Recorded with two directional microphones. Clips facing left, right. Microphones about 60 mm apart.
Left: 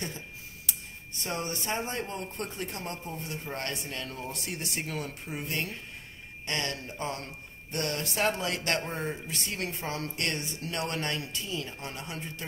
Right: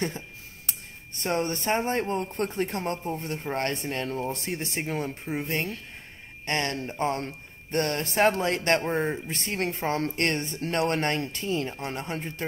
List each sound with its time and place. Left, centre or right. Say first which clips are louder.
0.7 s speech: right 2 dB; right